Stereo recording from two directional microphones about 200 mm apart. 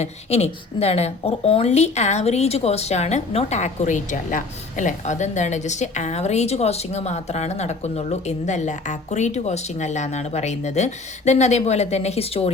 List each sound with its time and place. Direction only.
0.0 s a woman's voice: 30° left (ahead or behind)